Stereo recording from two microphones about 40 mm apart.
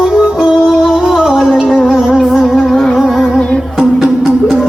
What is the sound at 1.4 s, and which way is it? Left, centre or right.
Music, centre.